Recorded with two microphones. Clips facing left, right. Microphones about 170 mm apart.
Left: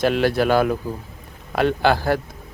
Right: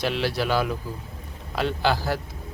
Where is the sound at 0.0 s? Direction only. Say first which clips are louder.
Left 7 dB; 50° left (ahead or behind).